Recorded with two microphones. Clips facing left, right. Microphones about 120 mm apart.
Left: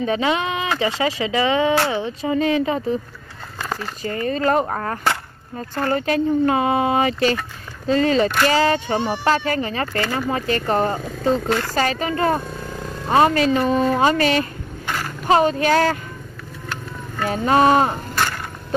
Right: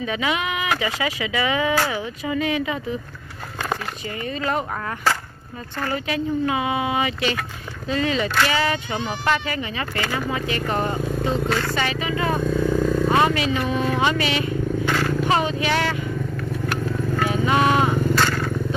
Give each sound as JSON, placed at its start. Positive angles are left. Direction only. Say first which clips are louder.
{"t": 0.0, "sound": "speech", "louder": "left 4 dB", "side_deg": 35}
{"t": 4.0, "sound": "speech", "louder": "left 6 dB", "side_deg": 40}
{"t": 17.3, "sound": "speech", "louder": "left 5 dB", "side_deg": 40}